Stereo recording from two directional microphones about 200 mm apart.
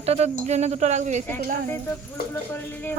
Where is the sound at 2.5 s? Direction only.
10° left (ahead or behind).